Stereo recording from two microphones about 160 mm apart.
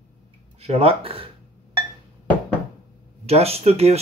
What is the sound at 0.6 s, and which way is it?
Speech, 40° right (ahead or behind).